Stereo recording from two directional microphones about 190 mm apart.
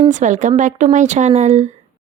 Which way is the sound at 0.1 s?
40° right (ahead or behind).